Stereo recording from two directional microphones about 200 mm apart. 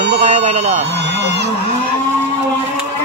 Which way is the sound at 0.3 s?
35° right (ahead or behind).